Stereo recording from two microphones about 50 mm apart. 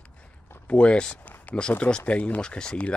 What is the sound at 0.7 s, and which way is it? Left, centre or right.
Speech, left.